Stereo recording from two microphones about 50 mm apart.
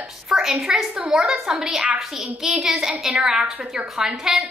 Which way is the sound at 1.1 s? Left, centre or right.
Centre.